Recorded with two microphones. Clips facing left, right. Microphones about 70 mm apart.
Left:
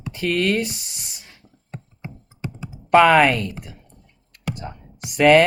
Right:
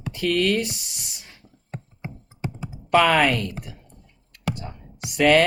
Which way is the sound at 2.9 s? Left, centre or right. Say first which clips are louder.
Left 4 dB; left.